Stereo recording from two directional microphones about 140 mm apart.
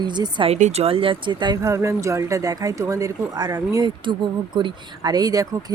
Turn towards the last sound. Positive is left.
turn(degrees=-25)  # may be behind; listen again after turning